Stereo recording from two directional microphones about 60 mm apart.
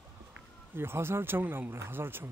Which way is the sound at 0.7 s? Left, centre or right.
Right.